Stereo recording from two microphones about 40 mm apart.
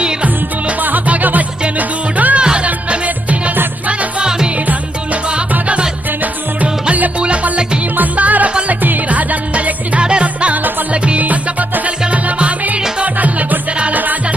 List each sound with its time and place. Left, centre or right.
0.8 s music: right
2.4 s music: right
2.6 s music: right
4.2 s music: centre
5.3 s music: right
8.1 s music: right
10.0 s music: right
10.5 s music: right
10.9 s music: right
11.2 s music: right
12.4 s music: right